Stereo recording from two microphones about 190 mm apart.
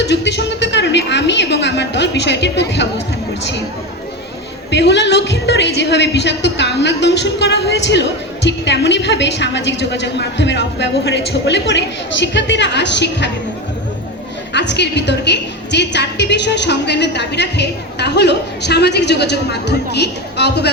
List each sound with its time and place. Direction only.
0.0 s speech: 65° left (ahead or behind)
4.7 s a woman's voice: 65° left (ahead or behind)
14.5 s a woman's voice: 65° left (ahead or behind)